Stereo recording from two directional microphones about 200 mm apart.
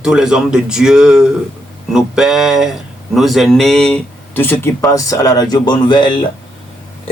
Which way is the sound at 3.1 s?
Centre (ahead or behind).